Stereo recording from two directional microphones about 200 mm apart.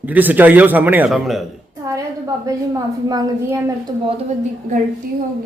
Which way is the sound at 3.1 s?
20° right (ahead or behind).